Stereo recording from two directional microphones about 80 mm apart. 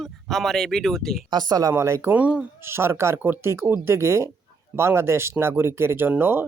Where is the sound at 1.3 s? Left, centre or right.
Right.